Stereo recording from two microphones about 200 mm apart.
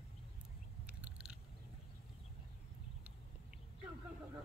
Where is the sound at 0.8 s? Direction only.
5° right (ahead or behind).